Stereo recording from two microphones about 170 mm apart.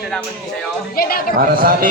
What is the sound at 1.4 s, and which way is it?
Speech, 60° right (ahead or behind).